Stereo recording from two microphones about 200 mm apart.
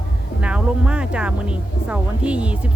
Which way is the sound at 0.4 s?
5° right (ahead or behind).